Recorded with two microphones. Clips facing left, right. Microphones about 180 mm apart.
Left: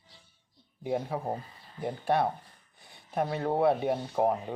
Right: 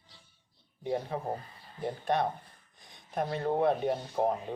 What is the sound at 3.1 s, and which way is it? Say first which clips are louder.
Speech: left 1 dB; 5° left (ahead or behind).